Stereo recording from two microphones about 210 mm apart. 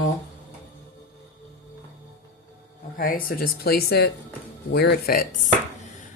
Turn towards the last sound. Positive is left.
turn(degrees=45)  # may be behind; listen again after turning